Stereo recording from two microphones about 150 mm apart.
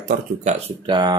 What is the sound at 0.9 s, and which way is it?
Speech, 30° right (ahead or behind).